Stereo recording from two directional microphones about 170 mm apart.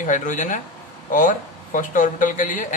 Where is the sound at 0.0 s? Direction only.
50° left (ahead or behind).